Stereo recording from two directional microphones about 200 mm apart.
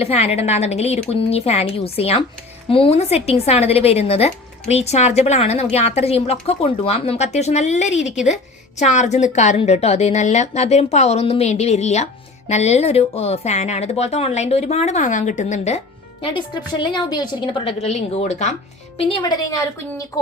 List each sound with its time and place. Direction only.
0.0 s a woman's voice: 30° left (ahead or behind)
16.2 s a woman's voice: 25° left (ahead or behind)
18.9 s a woman's voice: 25° left (ahead or behind)